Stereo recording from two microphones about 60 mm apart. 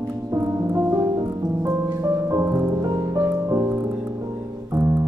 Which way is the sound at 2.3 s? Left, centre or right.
Right.